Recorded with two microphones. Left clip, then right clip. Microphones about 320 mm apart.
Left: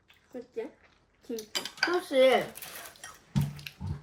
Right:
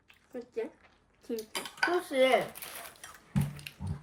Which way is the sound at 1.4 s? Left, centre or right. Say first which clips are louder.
Left 2 dB; centre.